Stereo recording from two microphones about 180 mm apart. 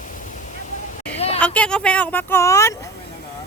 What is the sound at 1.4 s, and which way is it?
Speech, 5° left (ahead or behind).